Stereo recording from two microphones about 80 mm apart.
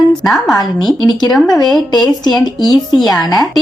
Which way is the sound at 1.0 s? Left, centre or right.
Left.